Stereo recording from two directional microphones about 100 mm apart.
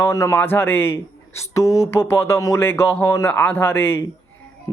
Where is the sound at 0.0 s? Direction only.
30° left (ahead or behind).